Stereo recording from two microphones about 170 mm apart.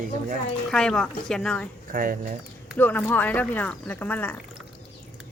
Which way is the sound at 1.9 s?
55° right (ahead or behind).